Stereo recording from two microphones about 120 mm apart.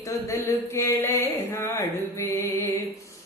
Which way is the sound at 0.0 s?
25° left (ahead or behind).